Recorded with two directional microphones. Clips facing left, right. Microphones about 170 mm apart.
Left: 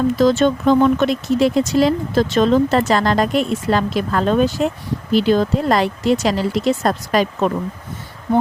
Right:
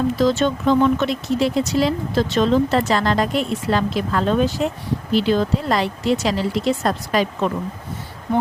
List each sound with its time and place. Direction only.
0.2 s speech: 50° left (ahead or behind)